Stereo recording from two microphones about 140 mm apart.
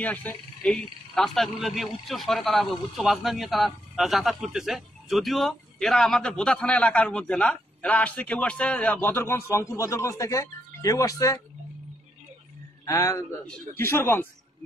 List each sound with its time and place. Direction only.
0.0 s speech: 10° left (ahead or behind)
12.8 s a man's voice: 20° left (ahead or behind)